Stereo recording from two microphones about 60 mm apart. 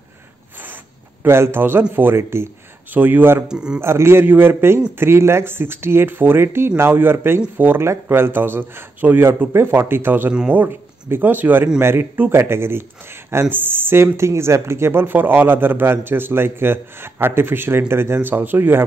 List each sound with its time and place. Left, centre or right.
1.2 s a man's voice: right
2.9 s speech: right
3.4 s speech: centre
3.8 s speech: right